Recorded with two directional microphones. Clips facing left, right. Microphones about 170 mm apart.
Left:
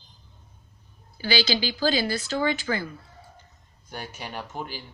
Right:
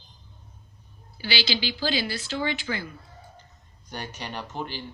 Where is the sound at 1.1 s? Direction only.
45° left (ahead or behind).